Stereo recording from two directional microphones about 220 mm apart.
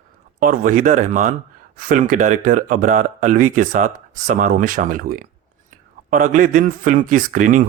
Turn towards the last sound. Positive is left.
turn(degrees=-35)  # may be behind; listen again after turning